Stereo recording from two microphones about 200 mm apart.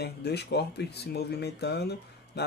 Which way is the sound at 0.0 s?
55° left (ahead or behind).